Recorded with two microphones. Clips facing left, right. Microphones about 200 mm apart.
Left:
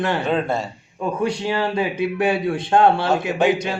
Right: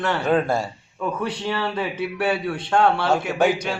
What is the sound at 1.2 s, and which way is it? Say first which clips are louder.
A man's voice: left 7 dB; 15° left (ahead or behind).